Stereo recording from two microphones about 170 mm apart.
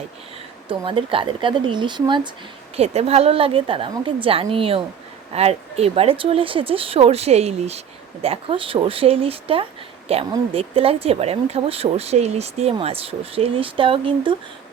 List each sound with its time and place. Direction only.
0.7 s speech: 30° right (ahead or behind)
2.7 s speech: 35° right (ahead or behind)